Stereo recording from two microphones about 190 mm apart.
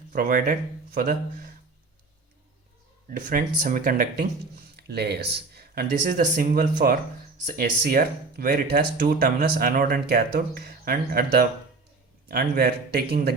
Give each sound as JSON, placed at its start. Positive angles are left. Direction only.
{"t": 0.1, "sound": "speech", "side_deg": -45}
{"t": 3.1, "sound": "speech", "side_deg": -45}